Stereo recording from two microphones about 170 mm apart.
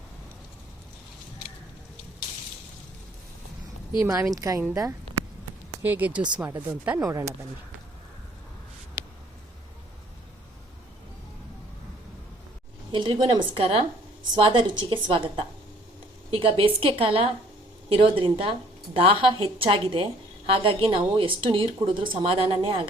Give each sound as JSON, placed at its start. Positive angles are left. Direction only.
{"t": 4.0, "sound": "a woman's voice", "side_deg": -15}
{"t": 9.0, "sound": "a sound", "side_deg": -15}
{"t": 12.9, "sound": "a woman's voice", "side_deg": -25}